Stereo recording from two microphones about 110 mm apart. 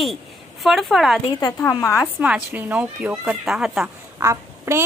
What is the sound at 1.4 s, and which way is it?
Speech, 35° left (ahead or behind).